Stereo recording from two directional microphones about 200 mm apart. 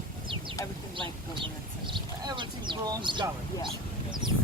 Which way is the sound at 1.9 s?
25° right (ahead or behind).